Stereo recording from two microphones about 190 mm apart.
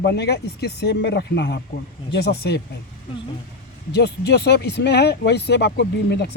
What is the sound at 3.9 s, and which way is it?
Speech, 60° left (ahead or behind).